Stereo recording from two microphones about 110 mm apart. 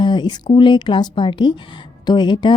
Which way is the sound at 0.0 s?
45° left (ahead or behind).